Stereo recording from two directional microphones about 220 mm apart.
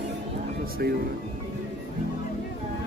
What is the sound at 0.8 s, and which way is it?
Speech, 45° right (ahead or behind).